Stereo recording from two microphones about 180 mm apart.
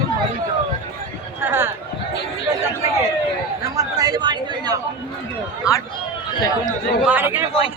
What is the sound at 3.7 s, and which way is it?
A man's voice, 20° right (ahead or behind).